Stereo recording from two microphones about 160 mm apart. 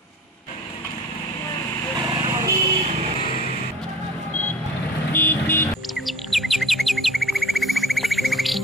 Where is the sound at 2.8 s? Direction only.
45° right (ahead or behind).